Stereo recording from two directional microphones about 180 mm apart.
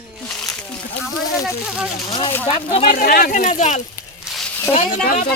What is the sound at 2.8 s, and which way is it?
Speech, 55° left (ahead or behind).